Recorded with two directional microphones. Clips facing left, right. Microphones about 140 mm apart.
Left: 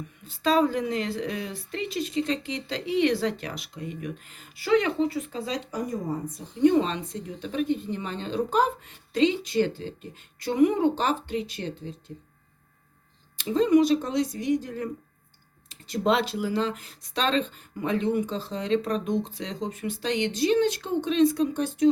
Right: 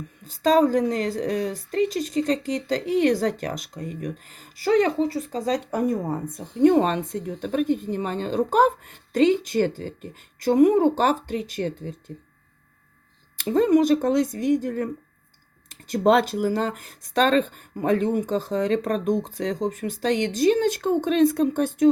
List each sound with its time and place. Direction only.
0.3 s a woman's voice: 40° right (ahead or behind)
5.7 s a woman's voice: 60° right (ahead or behind)
13.3 s a woman's voice: 55° right (ahead or behind)